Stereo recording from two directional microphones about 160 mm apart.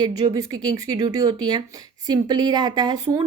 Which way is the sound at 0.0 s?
20° right (ahead or behind).